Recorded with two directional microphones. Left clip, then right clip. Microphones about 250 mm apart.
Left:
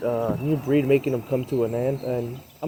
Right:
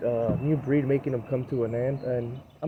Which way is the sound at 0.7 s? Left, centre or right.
Left.